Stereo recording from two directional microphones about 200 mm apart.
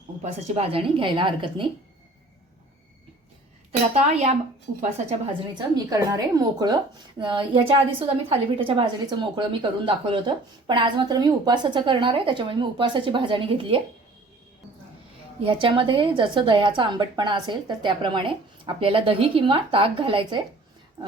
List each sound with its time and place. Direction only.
0.2 s a woman's voice: 30° right (ahead or behind)
3.7 s a woman's voice: 35° right (ahead or behind)
5.5 s a woman's voice: 20° right (ahead or behind)
15.4 s a woman's voice: 25° right (ahead or behind)